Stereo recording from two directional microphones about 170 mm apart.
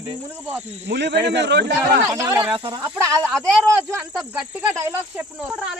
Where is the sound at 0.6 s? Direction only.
40° right (ahead or behind).